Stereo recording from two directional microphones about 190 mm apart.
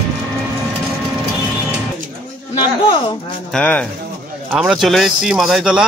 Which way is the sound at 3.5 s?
10° left (ahead or behind).